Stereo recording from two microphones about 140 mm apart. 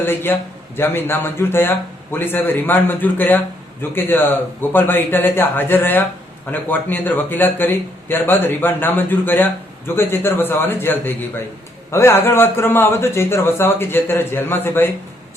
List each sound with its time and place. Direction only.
0.0 s speech: 15° left (ahead or behind)